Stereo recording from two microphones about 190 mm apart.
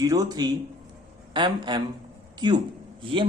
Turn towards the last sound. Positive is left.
turn(degrees=-25)  # may be behind; listen again after turning